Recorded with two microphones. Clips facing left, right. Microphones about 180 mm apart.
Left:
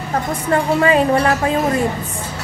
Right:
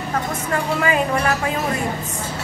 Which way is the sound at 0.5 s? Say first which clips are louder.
Left 7 dB; 30° left (ahead or behind).